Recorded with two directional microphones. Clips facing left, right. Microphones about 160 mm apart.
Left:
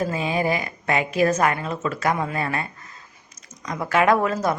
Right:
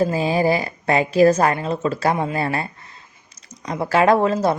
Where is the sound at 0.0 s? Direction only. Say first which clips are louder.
Right 5 dB; 30° right (ahead or behind).